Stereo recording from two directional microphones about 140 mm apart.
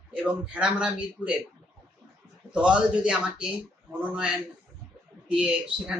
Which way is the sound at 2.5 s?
5° right (ahead or behind).